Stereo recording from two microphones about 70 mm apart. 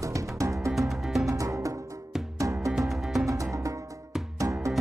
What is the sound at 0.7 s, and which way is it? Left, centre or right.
Music, centre.